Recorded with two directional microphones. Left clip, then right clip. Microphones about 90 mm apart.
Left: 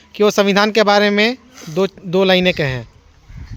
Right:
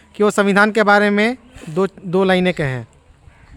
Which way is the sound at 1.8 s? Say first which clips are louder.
Left 1 dB; 5° right (ahead or behind).